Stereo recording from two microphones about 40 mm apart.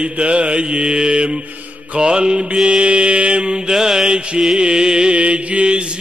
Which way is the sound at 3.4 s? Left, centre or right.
Centre.